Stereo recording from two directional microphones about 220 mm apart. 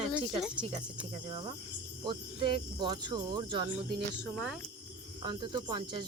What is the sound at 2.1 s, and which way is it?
Speech, 20° right (ahead or behind).